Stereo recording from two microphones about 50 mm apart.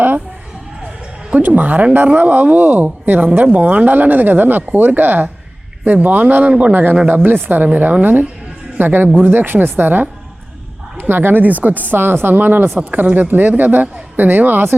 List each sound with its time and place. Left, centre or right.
1.4 s speech: right
7.1 s speech: right
8.8 s speech: right